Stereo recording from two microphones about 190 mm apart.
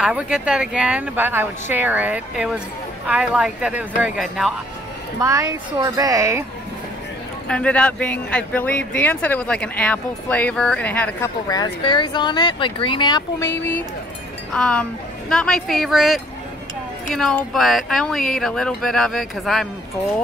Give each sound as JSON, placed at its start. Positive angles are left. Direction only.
{"t": 0.0, "sound": "speech", "side_deg": -5}
{"t": 5.2, "sound": "speech", "side_deg": -15}
{"t": 7.4, "sound": "speech", "side_deg": 5}